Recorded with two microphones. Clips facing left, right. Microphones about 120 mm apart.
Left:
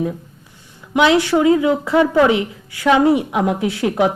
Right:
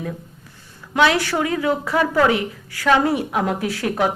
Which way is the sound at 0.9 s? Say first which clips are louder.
Left 4 dB; 20° left (ahead or behind).